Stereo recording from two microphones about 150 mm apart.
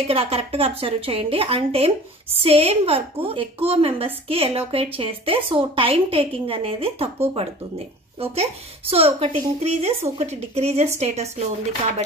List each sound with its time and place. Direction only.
0.1 s a woman's voice: 40° right (ahead or behind)
8.2 s a woman's voice: 40° right (ahead or behind)